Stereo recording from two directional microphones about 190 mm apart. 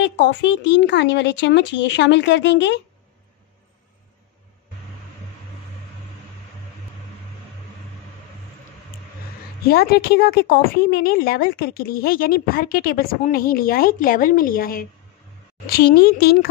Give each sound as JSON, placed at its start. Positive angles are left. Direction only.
{"t": 0.0, "sound": "speech", "side_deg": 65}
{"t": 9.7, "sound": "a woman's voice", "side_deg": 55}